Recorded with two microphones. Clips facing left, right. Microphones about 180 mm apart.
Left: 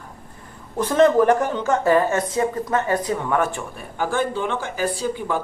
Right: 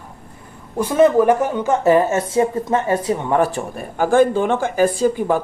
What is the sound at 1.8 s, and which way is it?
Speech, 25° right (ahead or behind).